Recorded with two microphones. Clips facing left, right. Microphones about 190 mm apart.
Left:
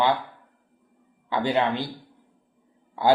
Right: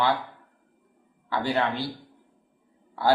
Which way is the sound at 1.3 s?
20° left (ahead or behind).